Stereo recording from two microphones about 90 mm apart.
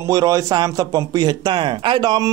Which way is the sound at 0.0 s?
40° right (ahead or behind).